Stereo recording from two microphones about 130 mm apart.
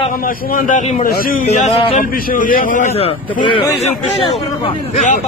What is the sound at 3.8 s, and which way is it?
Speech, 50° left (ahead or behind).